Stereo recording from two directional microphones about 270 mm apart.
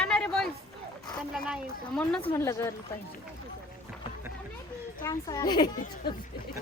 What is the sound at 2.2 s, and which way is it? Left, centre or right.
Speech, centre.